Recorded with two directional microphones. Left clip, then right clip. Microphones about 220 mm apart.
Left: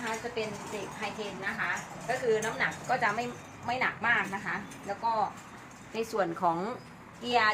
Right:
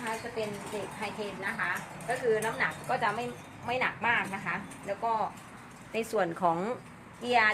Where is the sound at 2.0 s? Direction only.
10° right (ahead or behind).